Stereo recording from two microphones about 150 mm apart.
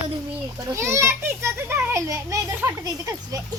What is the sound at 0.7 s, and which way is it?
A child's voice, 20° right (ahead or behind).